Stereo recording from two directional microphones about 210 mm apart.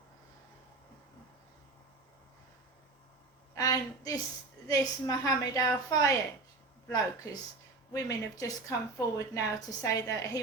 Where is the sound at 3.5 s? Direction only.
15° left (ahead or behind).